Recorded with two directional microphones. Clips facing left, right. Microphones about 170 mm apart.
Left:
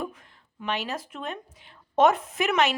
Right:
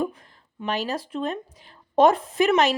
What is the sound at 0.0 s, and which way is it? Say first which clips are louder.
A woman's voice: right 7 dB; 35° right (ahead or behind).